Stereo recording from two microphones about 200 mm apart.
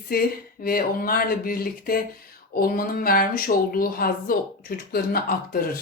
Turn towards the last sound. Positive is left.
turn(degrees=45)  # may be behind; listen again after turning